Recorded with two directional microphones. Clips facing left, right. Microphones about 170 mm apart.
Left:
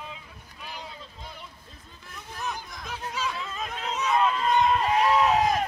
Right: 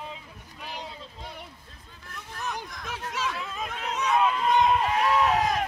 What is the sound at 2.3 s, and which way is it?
Hubbub, 10° left (ahead or behind).